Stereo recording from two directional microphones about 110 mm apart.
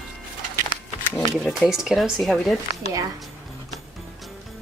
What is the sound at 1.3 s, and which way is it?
Speech, centre (ahead or behind).